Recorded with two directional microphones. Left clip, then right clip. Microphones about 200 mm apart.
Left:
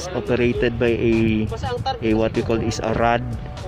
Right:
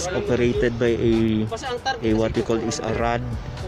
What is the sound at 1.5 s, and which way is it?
Speech, 40° right (ahead or behind).